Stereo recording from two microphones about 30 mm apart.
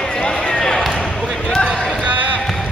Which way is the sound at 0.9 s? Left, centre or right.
Centre.